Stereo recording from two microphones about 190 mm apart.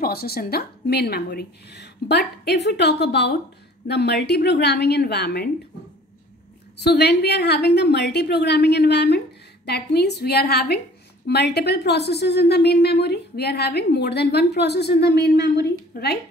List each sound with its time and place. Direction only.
0.0 s speech: 55° left (ahead or behind)
6.8 s speech: 60° left (ahead or behind)